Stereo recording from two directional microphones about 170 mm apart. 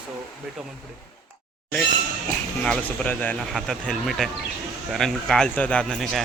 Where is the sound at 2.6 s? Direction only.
10° left (ahead or behind).